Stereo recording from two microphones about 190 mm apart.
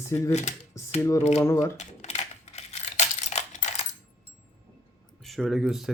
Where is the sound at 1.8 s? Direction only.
35° left (ahead or behind).